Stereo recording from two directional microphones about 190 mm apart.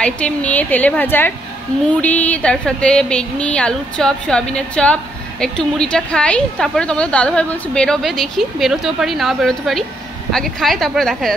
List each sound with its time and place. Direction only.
0.0 s a woman's voice: 5° left (ahead or behind)